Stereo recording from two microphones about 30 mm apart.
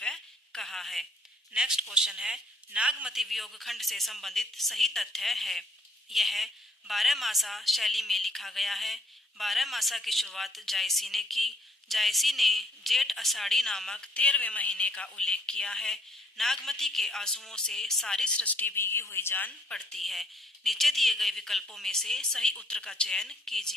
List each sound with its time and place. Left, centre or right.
0.1 s a sound: centre
1.5 s speech: centre
2.7 s a man's voice: right
3.2 s speech: centre; by 14.1 s left
14.1 s a woman's voice: left; by 17.2 s centre
17.2 s a woman's voice: centre
18.3 s a woman's voice: left
19.7 s speech: left
20.0 s a woman's voice: centre
22.5 s speech: left; by 23.7 s centre